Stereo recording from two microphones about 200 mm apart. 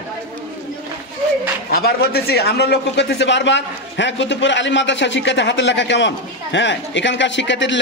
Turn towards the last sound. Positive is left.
turn(degrees=65)  # may be behind; listen again after turning